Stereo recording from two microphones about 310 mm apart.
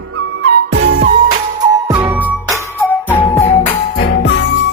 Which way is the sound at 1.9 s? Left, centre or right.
Centre.